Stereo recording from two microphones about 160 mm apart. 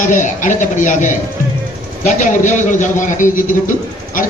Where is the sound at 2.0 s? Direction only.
50° left (ahead or behind).